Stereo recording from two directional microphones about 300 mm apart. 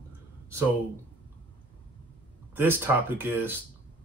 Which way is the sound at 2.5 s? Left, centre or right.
Centre.